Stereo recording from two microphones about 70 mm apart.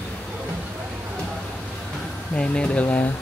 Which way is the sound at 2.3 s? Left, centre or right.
Centre.